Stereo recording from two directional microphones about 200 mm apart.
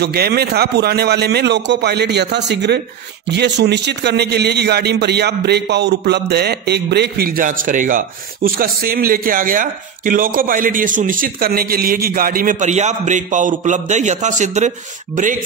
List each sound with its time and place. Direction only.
0.0 s a man's voice: 50° right (ahead or behind)